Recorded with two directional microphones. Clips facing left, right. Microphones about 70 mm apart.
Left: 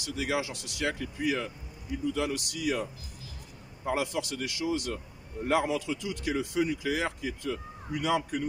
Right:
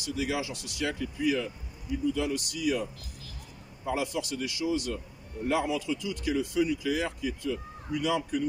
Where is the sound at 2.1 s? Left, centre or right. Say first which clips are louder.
Right 1 dB; left.